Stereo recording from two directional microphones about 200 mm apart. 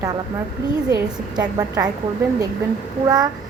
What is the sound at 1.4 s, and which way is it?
Speech, 20° right (ahead or behind).